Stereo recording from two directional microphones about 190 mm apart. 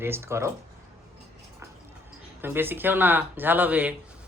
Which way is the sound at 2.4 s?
10° right (ahead or behind).